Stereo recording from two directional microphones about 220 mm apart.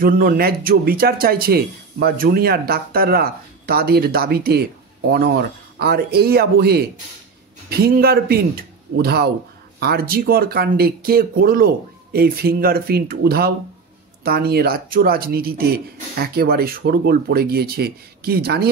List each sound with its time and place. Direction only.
0.0 s speech: 40° right (ahead or behind)